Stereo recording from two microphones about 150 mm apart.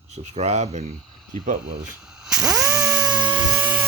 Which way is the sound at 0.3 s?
45° right (ahead or behind).